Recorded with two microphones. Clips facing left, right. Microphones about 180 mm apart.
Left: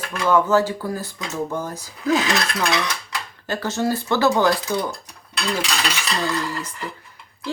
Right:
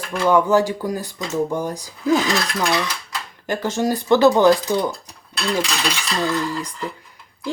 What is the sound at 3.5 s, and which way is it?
Speech, 15° right (ahead or behind).